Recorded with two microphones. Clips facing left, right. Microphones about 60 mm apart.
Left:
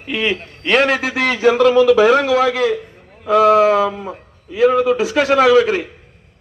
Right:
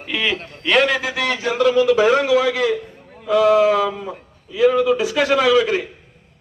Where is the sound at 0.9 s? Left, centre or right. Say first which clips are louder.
Left 3 dB; left.